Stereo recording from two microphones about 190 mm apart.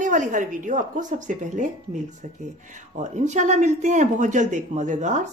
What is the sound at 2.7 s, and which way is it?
A man's voice, 40° right (ahead or behind).